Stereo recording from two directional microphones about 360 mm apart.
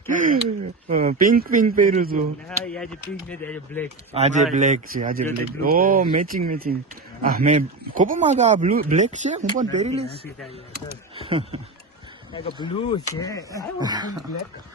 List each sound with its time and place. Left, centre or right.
0.1 s speech: right
2.5 s speech: centre
4.1 s speech: centre
11.1 s speech: centre
12.3 s speech: centre
13.7 s speech: centre